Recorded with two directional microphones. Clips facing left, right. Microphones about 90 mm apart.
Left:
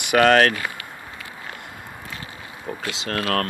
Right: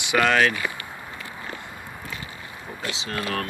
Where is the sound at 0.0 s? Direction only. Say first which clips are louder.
Left 4 dB; 50° left (ahead or behind).